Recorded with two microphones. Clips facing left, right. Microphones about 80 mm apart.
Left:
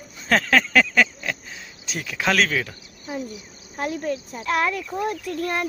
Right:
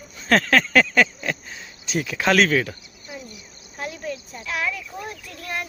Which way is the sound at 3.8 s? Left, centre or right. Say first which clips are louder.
Left 5 dB; left.